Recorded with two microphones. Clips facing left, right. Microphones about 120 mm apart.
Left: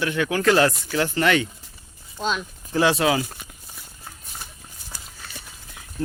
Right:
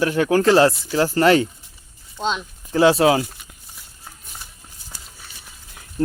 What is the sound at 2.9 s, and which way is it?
Speech, 35° right (ahead or behind).